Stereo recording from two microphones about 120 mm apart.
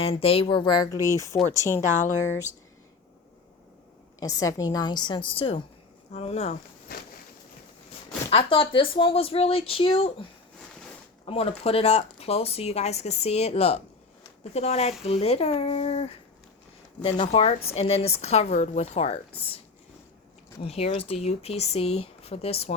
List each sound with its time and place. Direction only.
0.0 s a woman's voice: 55° left (ahead or behind); by 1.2 s 25° left (ahead or behind)
1.9 s speech: 90° left
4.2 s a woman's voice: 30° left (ahead or behind); by 5.5 s 50° left (ahead or behind)
6.1 s speech: 65° left (ahead or behind)
8.3 s speech: 50° left (ahead or behind)
11.3 s speech: 55° left (ahead or behind)
20.6 s speech: 55° left (ahead or behind)